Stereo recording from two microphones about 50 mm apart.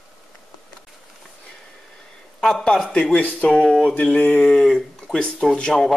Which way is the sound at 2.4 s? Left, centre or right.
Centre.